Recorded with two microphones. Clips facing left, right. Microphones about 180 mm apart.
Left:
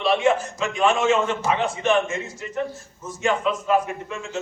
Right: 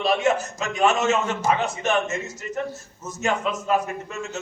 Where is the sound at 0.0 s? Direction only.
40° right (ahead or behind).